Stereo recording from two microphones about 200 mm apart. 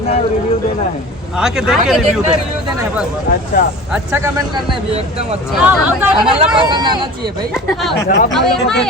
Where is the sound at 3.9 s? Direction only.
10° right (ahead or behind).